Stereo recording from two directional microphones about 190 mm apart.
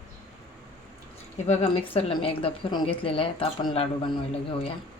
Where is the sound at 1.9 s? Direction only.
30° left (ahead or behind).